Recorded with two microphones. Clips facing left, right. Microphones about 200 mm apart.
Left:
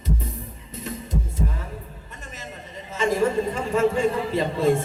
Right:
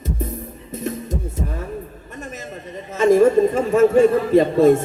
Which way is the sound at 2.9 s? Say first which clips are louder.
Right 8 dB; 50° right (ahead or behind).